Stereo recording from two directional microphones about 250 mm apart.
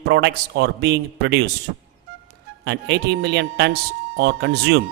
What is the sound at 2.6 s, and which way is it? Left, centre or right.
A man's voice, right.